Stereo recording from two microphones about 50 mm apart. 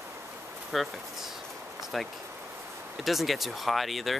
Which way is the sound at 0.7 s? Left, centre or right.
Centre.